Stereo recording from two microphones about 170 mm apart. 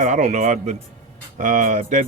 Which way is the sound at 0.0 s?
45° right (ahead or behind).